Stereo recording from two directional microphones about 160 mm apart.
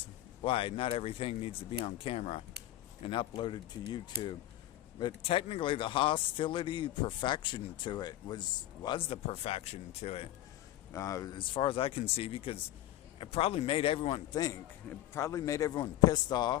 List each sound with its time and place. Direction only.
0.4 s a man's voice: 35° left (ahead or behind)
10.9 s a man's voice: 20° left (ahead or behind)
15.1 s speech: 20° left (ahead or behind)